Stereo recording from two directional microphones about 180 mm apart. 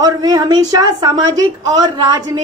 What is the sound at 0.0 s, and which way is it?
A woman's voice, 20° right (ahead or behind).